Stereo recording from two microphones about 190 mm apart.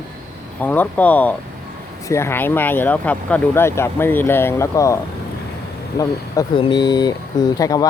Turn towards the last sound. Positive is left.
turn(degrees=20)  # may be behind; listen again after turning